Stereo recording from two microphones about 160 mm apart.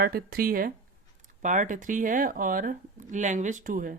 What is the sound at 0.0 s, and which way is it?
Speech, 70° right (ahead or behind).